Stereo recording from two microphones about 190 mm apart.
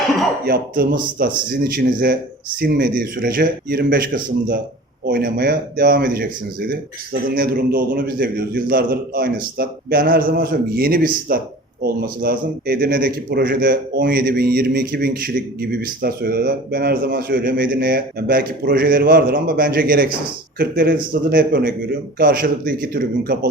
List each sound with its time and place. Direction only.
0.4 s a man's voice: 50° right (ahead or behind)